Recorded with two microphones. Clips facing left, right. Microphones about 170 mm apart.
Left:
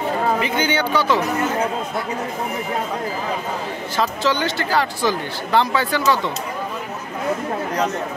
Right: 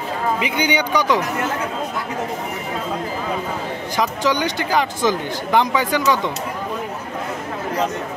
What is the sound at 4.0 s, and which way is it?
Speech, 15° right (ahead or behind).